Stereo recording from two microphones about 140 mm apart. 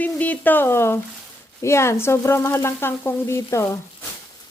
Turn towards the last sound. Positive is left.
turn(degrees=20)  # may be behind; listen again after turning